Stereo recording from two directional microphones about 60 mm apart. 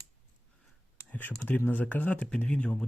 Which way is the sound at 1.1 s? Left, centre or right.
Left.